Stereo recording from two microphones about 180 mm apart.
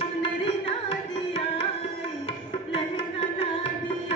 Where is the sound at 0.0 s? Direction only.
30° left (ahead or behind).